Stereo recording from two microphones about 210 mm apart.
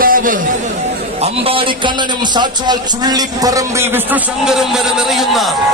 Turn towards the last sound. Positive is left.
turn(degrees=0)  # may be behind; listen again after turning